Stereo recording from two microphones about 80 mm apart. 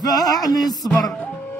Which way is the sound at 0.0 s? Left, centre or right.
Left.